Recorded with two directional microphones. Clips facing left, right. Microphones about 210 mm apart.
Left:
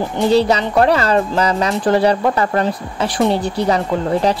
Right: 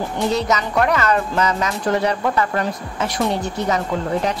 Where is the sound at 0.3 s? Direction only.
30° left (ahead or behind).